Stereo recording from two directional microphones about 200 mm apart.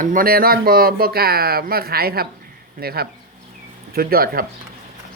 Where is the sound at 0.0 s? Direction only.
45° right (ahead or behind).